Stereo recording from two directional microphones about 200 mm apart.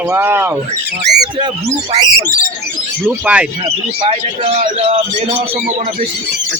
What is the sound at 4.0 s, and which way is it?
Speech, 30° right (ahead or behind).